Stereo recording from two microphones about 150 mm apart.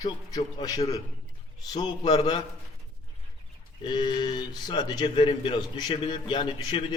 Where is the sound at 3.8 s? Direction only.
30° left (ahead or behind).